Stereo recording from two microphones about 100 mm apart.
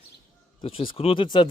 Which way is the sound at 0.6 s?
70° left (ahead or behind).